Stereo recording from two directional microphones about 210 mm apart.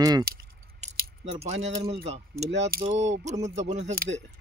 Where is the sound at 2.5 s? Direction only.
50° right (ahead or behind).